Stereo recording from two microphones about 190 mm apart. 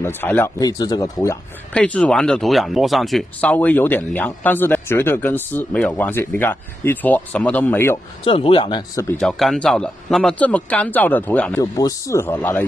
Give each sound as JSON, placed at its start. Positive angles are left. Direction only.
{"t": 0.0, "sound": "speech", "side_deg": 10}
{"t": 1.7, "sound": "speech", "side_deg": 5}
{"t": 8.2, "sound": "speech", "side_deg": 30}
{"t": 9.2, "sound": "a man's voice", "side_deg": 0}
{"t": 11.6, "sound": "speech", "side_deg": 20}